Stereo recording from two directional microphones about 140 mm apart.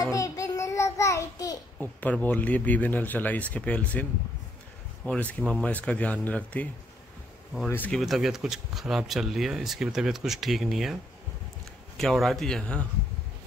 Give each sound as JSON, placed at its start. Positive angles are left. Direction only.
{"t": 0.0, "sound": "child singing", "side_deg": 25}
{"t": 1.8, "sound": "speech", "side_deg": 10}
{"t": 8.0, "sound": "speech", "side_deg": -5}
{"t": 12.0, "sound": "speech", "side_deg": 0}